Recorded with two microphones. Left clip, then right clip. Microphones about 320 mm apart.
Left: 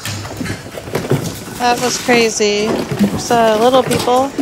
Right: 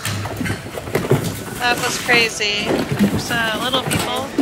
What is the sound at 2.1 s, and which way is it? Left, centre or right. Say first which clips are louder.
Speech: left 3 dB; left.